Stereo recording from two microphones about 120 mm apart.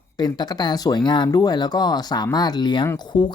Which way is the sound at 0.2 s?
35° left (ahead or behind).